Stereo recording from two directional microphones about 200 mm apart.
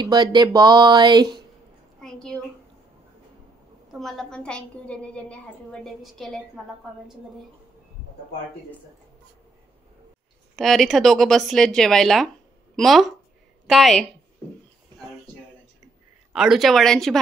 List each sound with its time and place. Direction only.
0.0 s speech: 20° right (ahead or behind)
2.0 s a sound: 5° left (ahead or behind)
3.9 s a woman's voice: centre (ahead or behind)
10.5 s a woman's voice: centre (ahead or behind)
16.3 s a woman's voice: centre (ahead or behind)